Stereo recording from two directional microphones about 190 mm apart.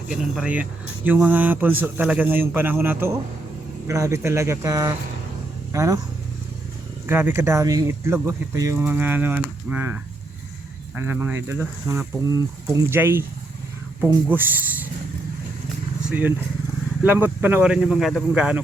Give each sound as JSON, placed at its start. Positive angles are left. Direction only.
{"t": 0.1, "sound": "speech", "side_deg": -5}
{"t": 7.1, "sound": "speech", "side_deg": -10}
{"t": 14.3, "sound": "speech", "side_deg": -10}
{"t": 16.0, "sound": "speech", "side_deg": -10}